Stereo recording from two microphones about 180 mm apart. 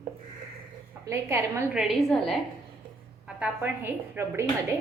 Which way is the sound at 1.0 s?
15° right (ahead or behind).